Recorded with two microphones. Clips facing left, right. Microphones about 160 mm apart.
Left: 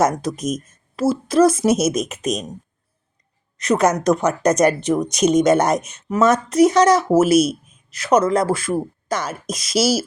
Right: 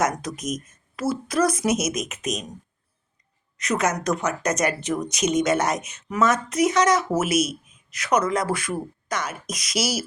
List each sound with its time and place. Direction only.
0.3 s speech: 30° left (ahead or behind)
3.6 s speech: 35° left (ahead or behind)